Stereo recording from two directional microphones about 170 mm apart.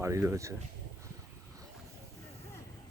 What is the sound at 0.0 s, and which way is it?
Speech, 15° right (ahead or behind).